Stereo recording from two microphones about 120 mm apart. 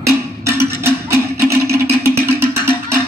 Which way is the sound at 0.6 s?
20° right (ahead or behind).